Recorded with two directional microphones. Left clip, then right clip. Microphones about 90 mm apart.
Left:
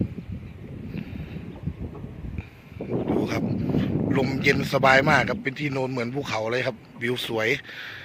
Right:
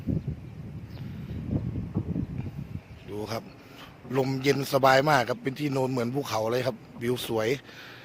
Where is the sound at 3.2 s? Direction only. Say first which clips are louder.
Left 8 dB; 15° right (ahead or behind).